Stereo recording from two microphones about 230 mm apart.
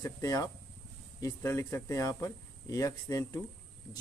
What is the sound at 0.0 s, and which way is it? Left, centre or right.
A man's voice, centre.